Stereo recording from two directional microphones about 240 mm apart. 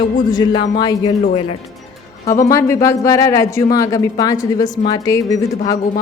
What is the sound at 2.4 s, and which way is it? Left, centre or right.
A woman's voice, centre.